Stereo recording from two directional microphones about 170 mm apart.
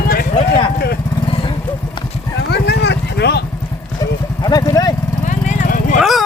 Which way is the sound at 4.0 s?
25° left (ahead or behind).